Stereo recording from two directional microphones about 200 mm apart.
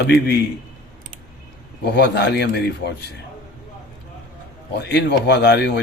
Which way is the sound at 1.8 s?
55° left (ahead or behind).